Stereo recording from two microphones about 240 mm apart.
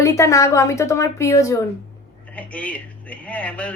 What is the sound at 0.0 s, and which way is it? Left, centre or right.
A woman's voice, centre.